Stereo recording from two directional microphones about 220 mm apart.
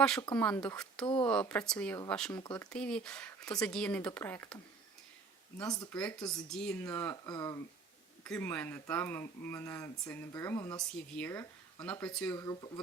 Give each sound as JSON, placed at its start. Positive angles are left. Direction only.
{"t": 0.0, "sound": "speech", "side_deg": 5}
{"t": 1.0, "sound": "speech", "side_deg": 20}
{"t": 1.3, "sound": "speech", "side_deg": 5}
{"t": 5.9, "sound": "speech", "side_deg": 5}
{"t": 10.9, "sound": "speech", "side_deg": 5}
{"t": 12.4, "sound": "speech", "side_deg": 20}